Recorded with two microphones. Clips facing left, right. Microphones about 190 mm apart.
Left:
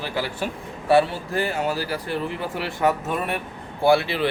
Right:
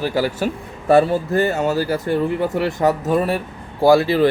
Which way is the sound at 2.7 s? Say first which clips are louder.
Right 1 dB; 40° right (ahead or behind).